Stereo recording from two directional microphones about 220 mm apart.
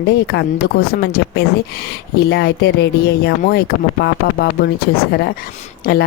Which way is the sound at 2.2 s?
45° left (ahead or behind).